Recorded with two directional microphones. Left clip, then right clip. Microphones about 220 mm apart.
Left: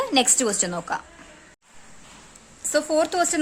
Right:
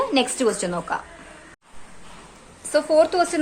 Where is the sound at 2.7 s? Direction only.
35° left (ahead or behind).